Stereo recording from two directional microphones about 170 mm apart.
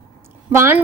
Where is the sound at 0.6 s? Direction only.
15° right (ahead or behind).